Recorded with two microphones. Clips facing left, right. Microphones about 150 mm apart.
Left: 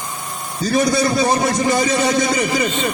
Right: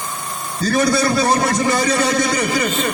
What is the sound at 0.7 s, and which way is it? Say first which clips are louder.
A man's voice: even; 20° left (ahead or behind).